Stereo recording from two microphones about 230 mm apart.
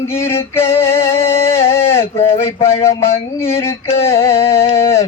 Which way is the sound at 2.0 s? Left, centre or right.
Left.